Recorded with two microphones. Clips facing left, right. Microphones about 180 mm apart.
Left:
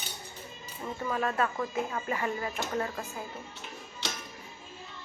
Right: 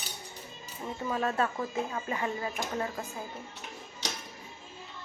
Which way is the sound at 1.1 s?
25° right (ahead or behind).